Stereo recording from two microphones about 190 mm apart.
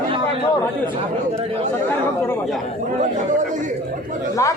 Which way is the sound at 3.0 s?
40° right (ahead or behind).